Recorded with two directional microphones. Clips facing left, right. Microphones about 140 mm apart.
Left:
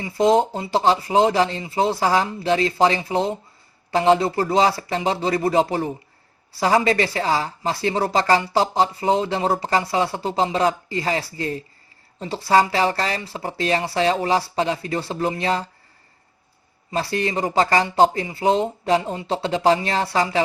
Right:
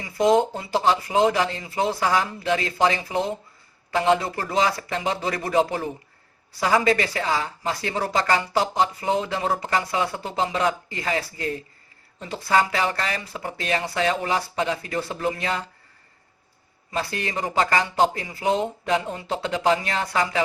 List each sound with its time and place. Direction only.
0.0 s speech: 30° left (ahead or behind)
16.9 s speech: 35° left (ahead or behind)